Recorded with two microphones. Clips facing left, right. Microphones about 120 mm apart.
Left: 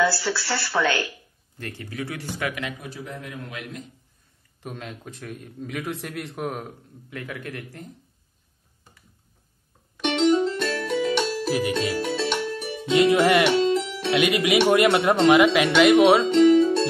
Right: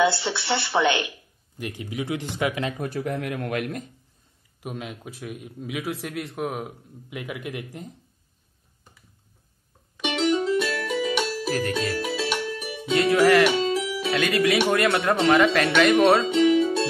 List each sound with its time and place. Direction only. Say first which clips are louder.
0.0 s speech: right 1 dB; 20° right (ahead or behind)
2.8 s speech: right 8 dB; 60° right (ahead or behind)
4.6 s a man's voice: right 2 dB; 5° right (ahead or behind)
7.1 s speech: right 1 dB; 15° right (ahead or behind)
9.9 s music: left 3 dB; 5° right (ahead or behind)
12.9 s music: even; 20° left (ahead or behind)
13.5 s music: left 3 dB; centre (ahead or behind)
14.1 s speech: left 2 dB; 15° left (ahead or behind); by 16.8 s 5° right (ahead or behind)